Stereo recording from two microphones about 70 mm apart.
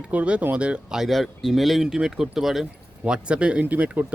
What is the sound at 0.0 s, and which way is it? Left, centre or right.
Speech, centre.